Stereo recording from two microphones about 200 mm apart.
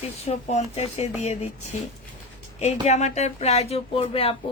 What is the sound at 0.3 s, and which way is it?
Speech, 35° left (ahead or behind).